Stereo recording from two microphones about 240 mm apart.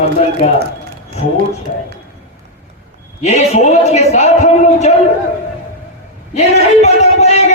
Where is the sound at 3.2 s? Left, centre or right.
Left.